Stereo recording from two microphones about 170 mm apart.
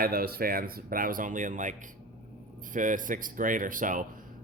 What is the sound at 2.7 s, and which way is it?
A man's voice, 50° right (ahead or behind).